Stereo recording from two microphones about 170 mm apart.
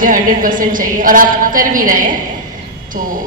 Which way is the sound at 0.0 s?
55° right (ahead or behind).